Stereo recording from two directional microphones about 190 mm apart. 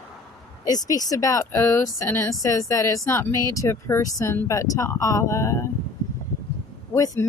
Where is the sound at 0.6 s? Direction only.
20° left (ahead or behind).